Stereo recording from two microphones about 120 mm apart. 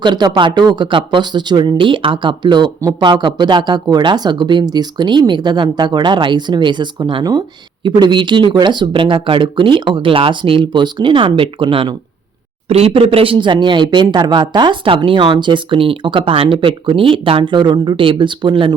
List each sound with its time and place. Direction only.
0.0 s speech: 35° right (ahead or behind)
12.6 s speech: 55° right (ahead or behind)